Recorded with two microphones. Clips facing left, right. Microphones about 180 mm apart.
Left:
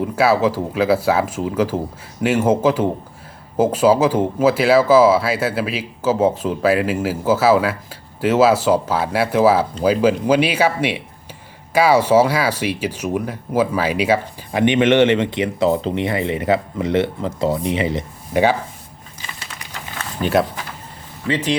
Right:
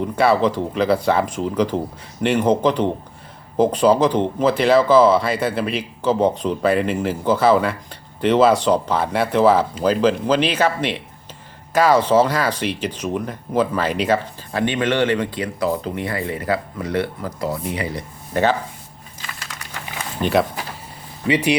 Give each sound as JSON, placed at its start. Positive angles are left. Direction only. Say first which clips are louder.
{"t": 0.0, "sound": "speech", "louder": "left 1 dB", "side_deg": 5}
{"t": 20.2, "sound": "speech", "louder": "left 1 dB", "side_deg": 0}
{"t": 21.2, "sound": "speech", "louder": "right 2 dB", "side_deg": -15}